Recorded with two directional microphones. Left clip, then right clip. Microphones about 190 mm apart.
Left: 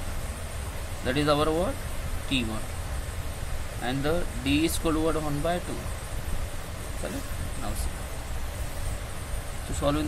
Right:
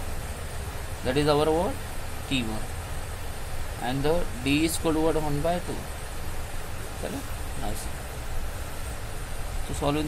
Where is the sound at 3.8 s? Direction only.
5° right (ahead or behind).